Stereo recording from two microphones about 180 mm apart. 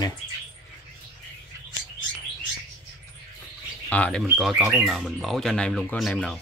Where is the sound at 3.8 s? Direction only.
10° left (ahead or behind).